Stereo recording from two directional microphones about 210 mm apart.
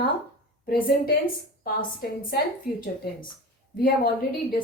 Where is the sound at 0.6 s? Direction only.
45° left (ahead or behind).